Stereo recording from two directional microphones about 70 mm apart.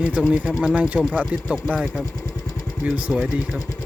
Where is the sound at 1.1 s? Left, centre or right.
Centre.